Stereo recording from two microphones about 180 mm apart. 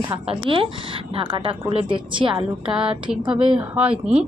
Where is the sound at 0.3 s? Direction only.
30° right (ahead or behind).